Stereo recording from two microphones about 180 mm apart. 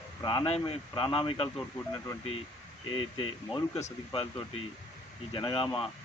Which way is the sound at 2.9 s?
30° left (ahead or behind).